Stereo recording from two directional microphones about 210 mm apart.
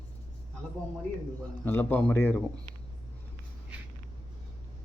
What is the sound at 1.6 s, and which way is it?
Speech, 10° left (ahead or behind).